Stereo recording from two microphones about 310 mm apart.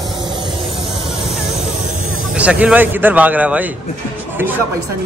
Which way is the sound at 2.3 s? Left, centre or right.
Centre.